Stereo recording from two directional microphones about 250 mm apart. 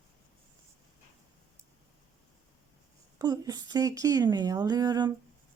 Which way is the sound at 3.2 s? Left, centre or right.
Centre.